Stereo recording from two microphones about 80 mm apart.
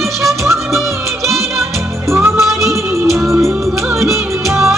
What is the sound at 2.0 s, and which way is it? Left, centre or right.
Music, right.